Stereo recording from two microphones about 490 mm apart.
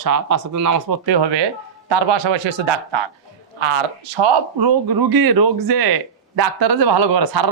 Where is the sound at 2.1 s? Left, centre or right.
Right.